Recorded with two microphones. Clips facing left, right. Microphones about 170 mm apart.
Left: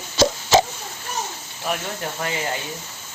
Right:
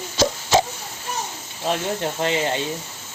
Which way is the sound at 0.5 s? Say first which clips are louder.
Left 2 dB; 90° left.